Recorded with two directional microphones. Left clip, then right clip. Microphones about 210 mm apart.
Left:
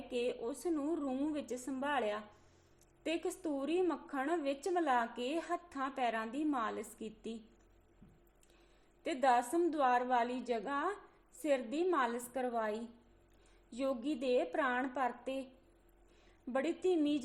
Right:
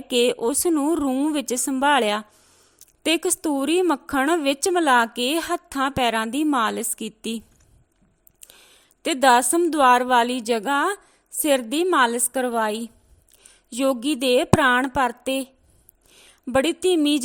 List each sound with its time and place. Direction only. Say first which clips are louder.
0.1 s a woman's voice: right 18 dB; 50° right (ahead or behind)
9.0 s a woman's voice: right 15 dB; 45° right (ahead or behind)